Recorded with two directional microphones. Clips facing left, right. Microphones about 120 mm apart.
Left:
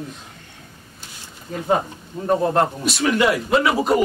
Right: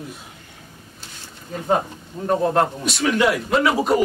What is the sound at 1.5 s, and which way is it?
A man's voice, centre (ahead or behind).